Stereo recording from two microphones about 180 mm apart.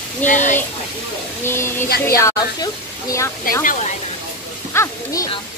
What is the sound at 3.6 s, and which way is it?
Speech, 45° left (ahead or behind).